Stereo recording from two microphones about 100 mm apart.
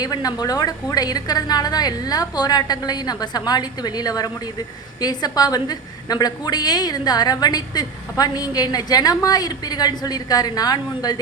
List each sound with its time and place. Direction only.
0.0 s a woman's voice: 40° left (ahead or behind)